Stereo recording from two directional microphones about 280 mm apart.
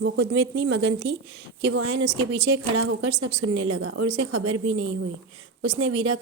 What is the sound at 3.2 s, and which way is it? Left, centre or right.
A woman's voice, right.